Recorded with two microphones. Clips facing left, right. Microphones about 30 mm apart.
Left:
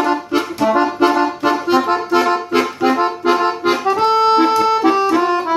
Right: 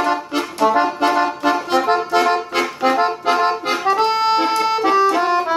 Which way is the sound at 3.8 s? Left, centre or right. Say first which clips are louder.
Left 2 dB; centre.